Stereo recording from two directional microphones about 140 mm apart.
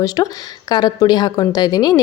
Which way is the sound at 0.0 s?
25° left (ahead or behind).